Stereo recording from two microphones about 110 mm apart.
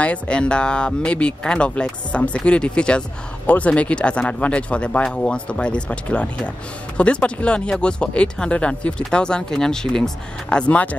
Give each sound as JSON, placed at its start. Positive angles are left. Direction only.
{"t": 0.0, "sound": "speech", "side_deg": 10}